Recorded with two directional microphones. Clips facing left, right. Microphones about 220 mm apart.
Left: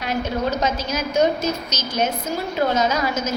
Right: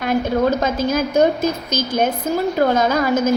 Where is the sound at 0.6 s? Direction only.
55° right (ahead or behind).